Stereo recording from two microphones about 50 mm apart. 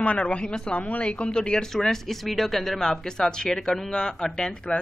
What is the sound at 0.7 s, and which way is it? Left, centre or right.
Speech, left.